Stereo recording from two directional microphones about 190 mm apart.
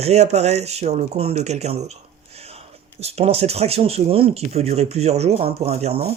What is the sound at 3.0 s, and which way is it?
Speech, 35° right (ahead or behind).